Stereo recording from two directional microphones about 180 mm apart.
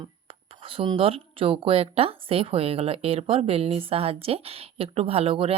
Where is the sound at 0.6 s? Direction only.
30° right (ahead or behind).